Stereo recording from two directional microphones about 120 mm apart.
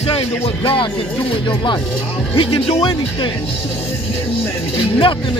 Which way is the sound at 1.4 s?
40° left (ahead or behind).